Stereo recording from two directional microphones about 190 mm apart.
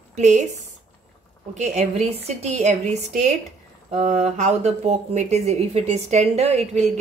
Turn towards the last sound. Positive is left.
turn(degrees=-35)  # may be behind; listen again after turning